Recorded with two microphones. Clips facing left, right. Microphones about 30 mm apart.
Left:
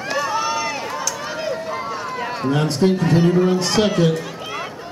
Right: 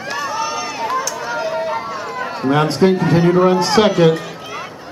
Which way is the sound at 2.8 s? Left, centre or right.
Centre.